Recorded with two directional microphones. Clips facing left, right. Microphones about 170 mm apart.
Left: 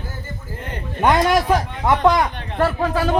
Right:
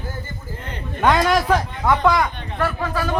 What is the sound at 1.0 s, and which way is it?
A man's voice, 15° left (ahead or behind).